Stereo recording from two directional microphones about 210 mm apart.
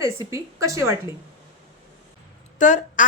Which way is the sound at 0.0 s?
15° right (ahead or behind).